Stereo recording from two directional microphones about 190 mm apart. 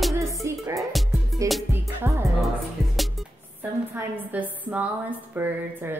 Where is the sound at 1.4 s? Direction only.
15° right (ahead or behind).